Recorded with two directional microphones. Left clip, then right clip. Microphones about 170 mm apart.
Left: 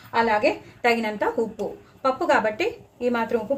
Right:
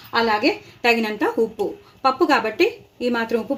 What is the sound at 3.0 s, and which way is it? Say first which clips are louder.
Speech: right 1 dB; 55° right (ahead or behind).